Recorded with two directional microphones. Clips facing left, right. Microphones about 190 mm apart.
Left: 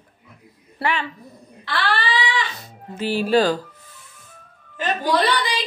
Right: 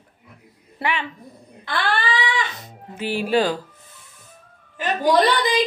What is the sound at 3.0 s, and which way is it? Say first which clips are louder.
Speech: left 2 dB; 15° right (ahead or behind).